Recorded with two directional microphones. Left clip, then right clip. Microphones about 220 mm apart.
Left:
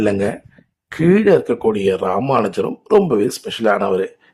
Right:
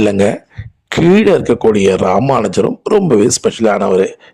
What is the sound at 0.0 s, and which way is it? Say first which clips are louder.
Speech: right 6 dB; 35° right (ahead or behind).